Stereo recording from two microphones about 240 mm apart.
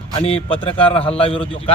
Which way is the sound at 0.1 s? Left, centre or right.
Left.